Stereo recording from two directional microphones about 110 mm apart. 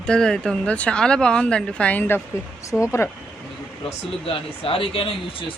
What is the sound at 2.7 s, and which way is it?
Speech, 10° left (ahead or behind).